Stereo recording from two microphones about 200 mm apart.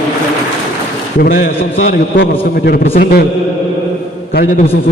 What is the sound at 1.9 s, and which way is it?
Speech, 50° left (ahead or behind).